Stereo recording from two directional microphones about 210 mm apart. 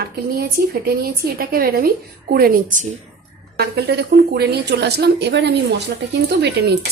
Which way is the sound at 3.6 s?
50° right (ahead or behind).